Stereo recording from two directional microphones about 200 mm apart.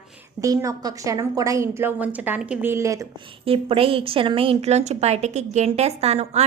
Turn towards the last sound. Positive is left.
turn(degrees=-30)  # may be behind; listen again after turning